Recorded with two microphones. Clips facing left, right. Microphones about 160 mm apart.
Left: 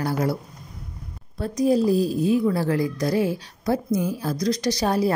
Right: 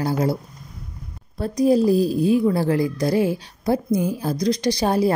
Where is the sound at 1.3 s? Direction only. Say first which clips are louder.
Right 3 dB; 30° right (ahead or behind).